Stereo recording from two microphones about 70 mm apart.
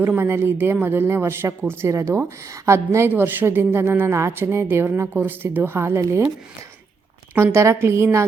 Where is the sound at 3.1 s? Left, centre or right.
Right.